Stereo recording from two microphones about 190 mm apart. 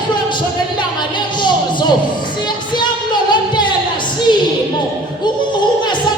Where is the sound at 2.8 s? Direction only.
25° left (ahead or behind).